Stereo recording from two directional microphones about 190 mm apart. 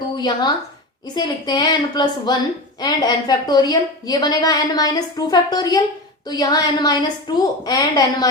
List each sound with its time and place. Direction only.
0.2 s a woman's voice: 20° left (ahead or behind)